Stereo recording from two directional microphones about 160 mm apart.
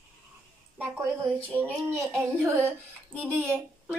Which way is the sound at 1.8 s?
15° right (ahead or behind).